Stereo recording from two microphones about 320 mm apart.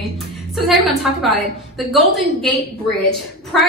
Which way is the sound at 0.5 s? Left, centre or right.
Centre.